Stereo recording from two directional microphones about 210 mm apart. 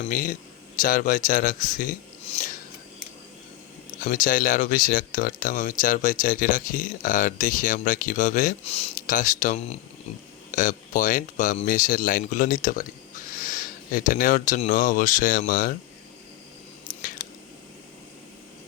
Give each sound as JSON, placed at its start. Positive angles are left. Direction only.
{"t": 0.0, "sound": "speech", "side_deg": 40}
{"t": 4.0, "sound": "speech", "side_deg": 40}